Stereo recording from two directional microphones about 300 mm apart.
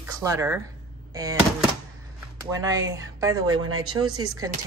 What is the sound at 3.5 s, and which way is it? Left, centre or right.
Speech, right.